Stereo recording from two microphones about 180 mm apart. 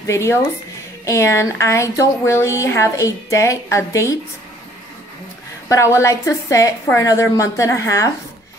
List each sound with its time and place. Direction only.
0.0 s a woman's voice: 15° left (ahead or behind)
5.7 s a woman's voice: 15° left (ahead or behind)